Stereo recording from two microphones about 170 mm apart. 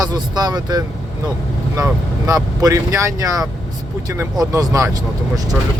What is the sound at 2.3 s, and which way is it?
Speech, 20° right (ahead or behind).